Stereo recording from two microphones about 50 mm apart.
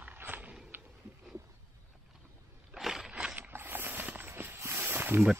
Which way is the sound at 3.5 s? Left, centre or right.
Right.